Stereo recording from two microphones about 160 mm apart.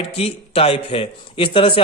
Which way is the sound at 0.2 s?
35° left (ahead or behind).